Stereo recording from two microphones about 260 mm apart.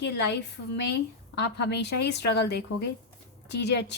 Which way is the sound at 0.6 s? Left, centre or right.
Left.